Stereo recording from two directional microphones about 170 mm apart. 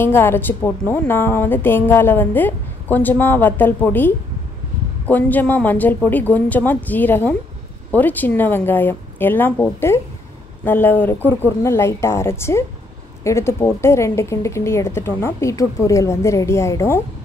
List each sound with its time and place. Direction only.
0.0 s a woman's voice: 15° left (ahead or behind)